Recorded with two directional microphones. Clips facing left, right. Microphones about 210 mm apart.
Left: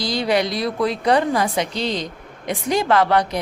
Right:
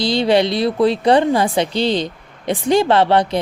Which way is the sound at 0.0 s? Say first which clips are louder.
Right 5 dB; 30° right (ahead or behind).